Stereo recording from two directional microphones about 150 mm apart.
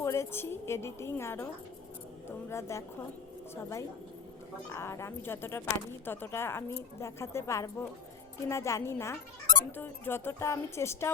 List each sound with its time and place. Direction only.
0.0 s speech: 20° left (ahead or behind)
2.5 s speech: 20° left (ahead or behind)